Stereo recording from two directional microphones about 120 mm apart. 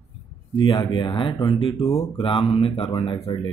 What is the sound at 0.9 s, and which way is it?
A man's voice, 40° left (ahead or behind).